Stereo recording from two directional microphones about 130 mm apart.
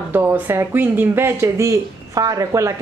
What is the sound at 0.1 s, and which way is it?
Speech, 20° right (ahead or behind).